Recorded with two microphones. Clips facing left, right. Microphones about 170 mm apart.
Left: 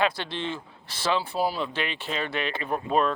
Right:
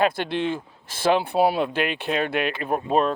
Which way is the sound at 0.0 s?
55° right (ahead or behind).